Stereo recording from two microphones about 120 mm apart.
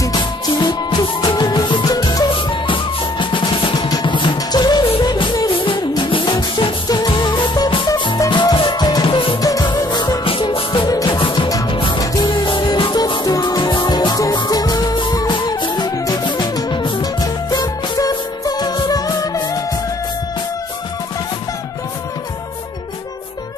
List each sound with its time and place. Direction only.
0.0 s music: 35° left (ahead or behind)
9.0 s music: 45° left (ahead or behind)
9.4 s music: 30° left (ahead or behind)
10.2 s music: 50° left (ahead or behind)
12.0 s music: 30° left (ahead or behind)
12.3 s music: 45° left (ahead or behind)